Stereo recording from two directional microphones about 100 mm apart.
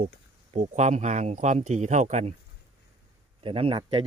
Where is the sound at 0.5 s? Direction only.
90° right.